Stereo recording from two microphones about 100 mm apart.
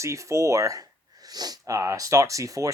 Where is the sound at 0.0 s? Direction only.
30° right (ahead or behind).